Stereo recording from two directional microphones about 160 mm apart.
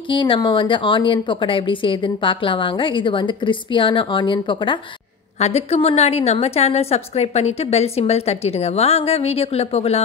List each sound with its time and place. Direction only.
0.1 s a woman's voice: 30° left (ahead or behind)
5.4 s a woman's voice: 40° left (ahead or behind)